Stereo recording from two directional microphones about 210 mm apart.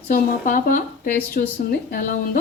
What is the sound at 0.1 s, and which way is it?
Speech, 40° left (ahead or behind).